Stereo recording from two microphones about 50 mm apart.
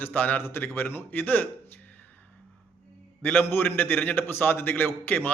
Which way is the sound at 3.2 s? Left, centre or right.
Left.